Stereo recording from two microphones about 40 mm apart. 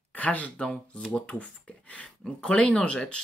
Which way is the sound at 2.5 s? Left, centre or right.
Left.